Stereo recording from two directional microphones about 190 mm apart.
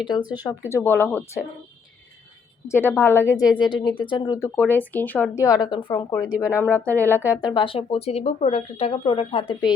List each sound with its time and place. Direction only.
0.7 s a woman's voice: 10° left (ahead or behind)
2.6 s a woman's voice: 10° left (ahead or behind)
7.4 s speech: 25° left (ahead or behind)